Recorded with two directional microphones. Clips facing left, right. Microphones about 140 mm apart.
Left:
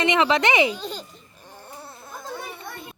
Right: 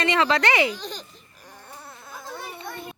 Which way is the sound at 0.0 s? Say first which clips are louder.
Left 2 dB; 20° left (ahead or behind).